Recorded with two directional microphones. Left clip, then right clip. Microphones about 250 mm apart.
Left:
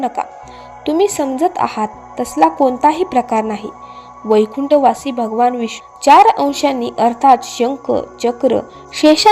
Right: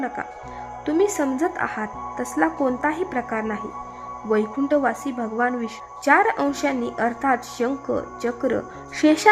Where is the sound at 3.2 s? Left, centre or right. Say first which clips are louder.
Left 11 dB; centre.